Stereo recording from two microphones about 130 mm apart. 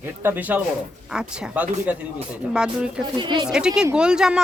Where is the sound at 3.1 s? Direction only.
35° right (ahead or behind).